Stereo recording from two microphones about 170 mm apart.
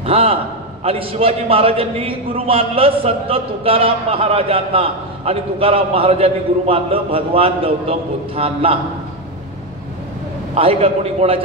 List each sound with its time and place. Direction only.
0.0 s a man's voice: 35° right (ahead or behind)
10.5 s a man's voice: 35° right (ahead or behind)